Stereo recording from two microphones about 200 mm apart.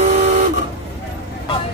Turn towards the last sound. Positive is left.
turn(degrees=-35)  # may be behind; listen again after turning